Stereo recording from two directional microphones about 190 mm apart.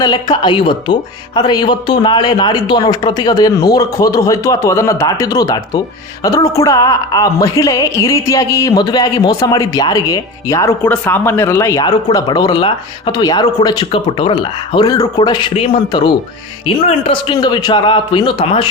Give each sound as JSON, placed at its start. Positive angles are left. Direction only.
{"t": 0.0, "sound": "speech", "side_deg": 25}